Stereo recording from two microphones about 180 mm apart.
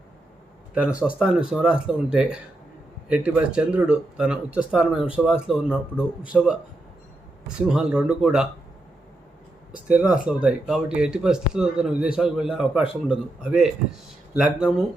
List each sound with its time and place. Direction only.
0.7 s speech: 5° right (ahead or behind)
9.7 s speech: 5° right (ahead or behind)